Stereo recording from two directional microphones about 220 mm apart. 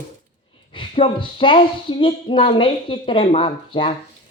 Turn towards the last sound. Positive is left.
turn(degrees=25)  # may be behind; listen again after turning